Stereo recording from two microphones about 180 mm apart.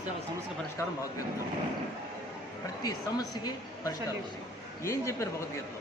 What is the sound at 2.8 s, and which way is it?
A woman's voice, 20° left (ahead or behind).